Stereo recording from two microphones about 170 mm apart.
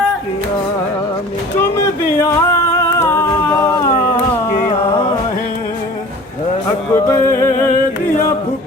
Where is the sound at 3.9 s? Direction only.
55° left (ahead or behind).